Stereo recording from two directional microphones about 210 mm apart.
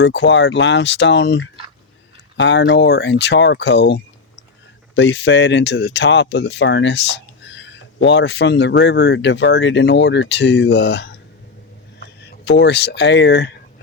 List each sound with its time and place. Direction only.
0.0 s speech: 55° left (ahead or behind)